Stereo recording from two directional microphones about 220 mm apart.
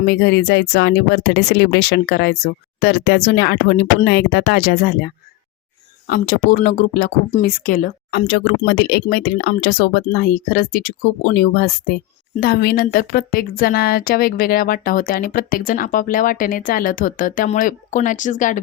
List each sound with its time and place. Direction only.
0.0 s speech: 50° left (ahead or behind)
6.1 s speech: 45° left (ahead or behind)